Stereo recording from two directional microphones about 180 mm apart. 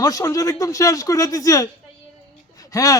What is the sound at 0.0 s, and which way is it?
Speech, 20° left (ahead or behind).